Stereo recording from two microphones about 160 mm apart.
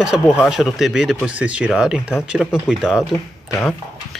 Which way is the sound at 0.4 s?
Centre (ahead or behind).